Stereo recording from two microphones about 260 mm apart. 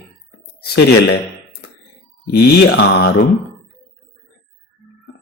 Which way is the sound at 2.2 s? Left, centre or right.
Left.